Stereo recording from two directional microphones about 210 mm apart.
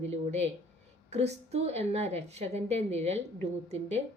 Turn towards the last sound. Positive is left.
turn(degrees=-30)  # may be behind; listen again after turning